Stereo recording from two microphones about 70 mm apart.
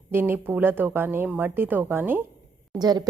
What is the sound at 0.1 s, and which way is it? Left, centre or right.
A woman's voice, right.